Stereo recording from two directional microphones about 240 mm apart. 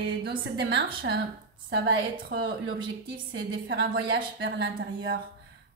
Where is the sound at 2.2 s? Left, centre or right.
Right.